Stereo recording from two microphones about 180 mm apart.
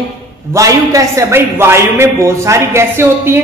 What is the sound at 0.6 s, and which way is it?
A man's voice, 15° right (ahead or behind).